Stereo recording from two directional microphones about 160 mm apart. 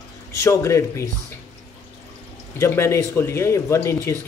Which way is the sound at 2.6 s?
15° left (ahead or behind).